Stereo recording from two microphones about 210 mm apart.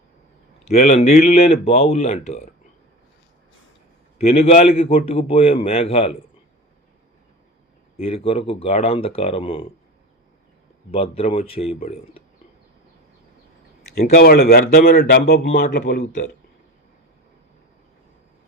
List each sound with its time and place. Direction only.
0.6 s speech: 35° left (ahead or behind)
4.4 s a man's voice: 30° left (ahead or behind)
7.9 s a man's voice: 25° left (ahead or behind)
10.9 s a man's voice: 30° left (ahead or behind)
14.2 s speech: 50° left (ahead or behind)